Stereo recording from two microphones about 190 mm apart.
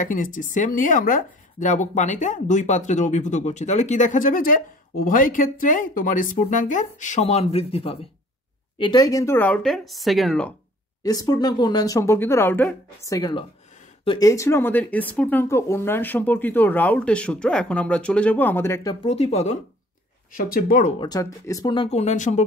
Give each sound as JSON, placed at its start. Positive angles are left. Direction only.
{"t": 0.0, "sound": "speech", "side_deg": 45}
{"t": 11.0, "sound": "speech", "side_deg": 20}
{"t": 19.0, "sound": "speech", "side_deg": 35}
{"t": 20.3, "sound": "speech", "side_deg": 50}
{"t": 21.0, "sound": "speech", "side_deg": 20}